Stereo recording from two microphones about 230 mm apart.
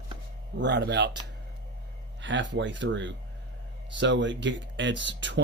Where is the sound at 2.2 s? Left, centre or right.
Right.